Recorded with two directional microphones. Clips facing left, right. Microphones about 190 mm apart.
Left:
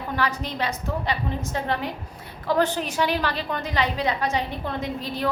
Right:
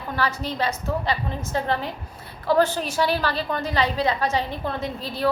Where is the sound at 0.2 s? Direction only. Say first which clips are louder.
Right 2 dB; 15° left (ahead or behind).